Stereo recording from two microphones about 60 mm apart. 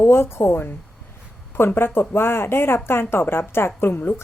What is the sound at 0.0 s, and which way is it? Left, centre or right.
A woman's voice, left.